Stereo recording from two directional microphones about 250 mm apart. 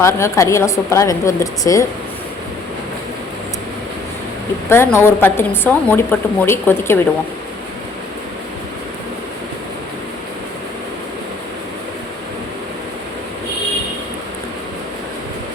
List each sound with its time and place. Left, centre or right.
0.0 s a woman's voice: centre
4.7 s a woman's voice: centre